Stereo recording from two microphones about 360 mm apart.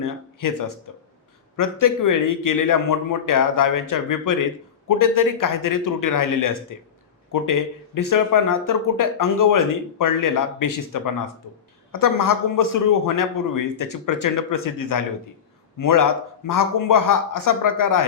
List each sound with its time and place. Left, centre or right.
0.0 s speech: left
1.5 s a man's voice: left